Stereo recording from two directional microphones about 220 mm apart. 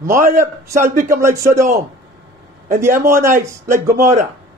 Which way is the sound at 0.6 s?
15° right (ahead or behind).